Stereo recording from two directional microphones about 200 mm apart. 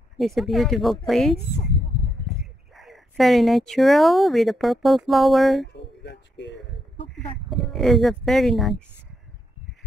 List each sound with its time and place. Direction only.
0.2 s speech: centre (ahead or behind)
5.7 s a sound: 60° left (ahead or behind)
7.4 s speech: centre (ahead or behind)